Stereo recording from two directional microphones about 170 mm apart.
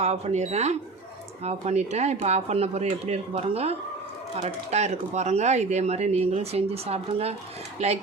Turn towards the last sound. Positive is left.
turn(degrees=-40)  # may be behind; listen again after turning